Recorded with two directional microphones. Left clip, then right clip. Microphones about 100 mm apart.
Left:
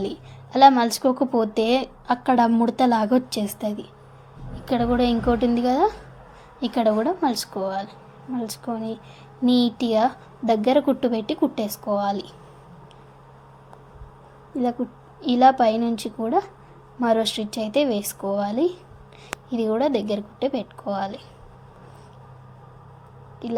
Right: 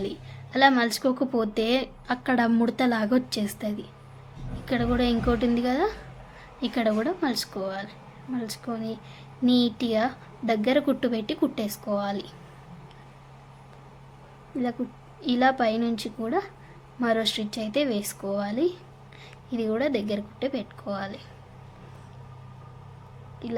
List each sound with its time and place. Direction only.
0.0 s a sound: 20° left (ahead or behind)
0.8 s a woman's voice: 20° left (ahead or behind)
15.2 s a woman's voice: 25° left (ahead or behind)
23.4 s a woman's voice: 25° left (ahead or behind)